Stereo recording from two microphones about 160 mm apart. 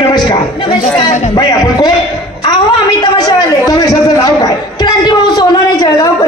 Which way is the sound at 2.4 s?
30° left (ahead or behind).